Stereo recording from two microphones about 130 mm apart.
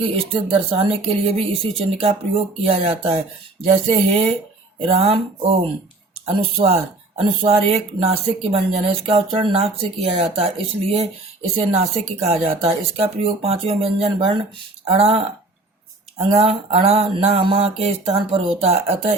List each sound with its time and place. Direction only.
0.0 s speech: 45° right (ahead or behind)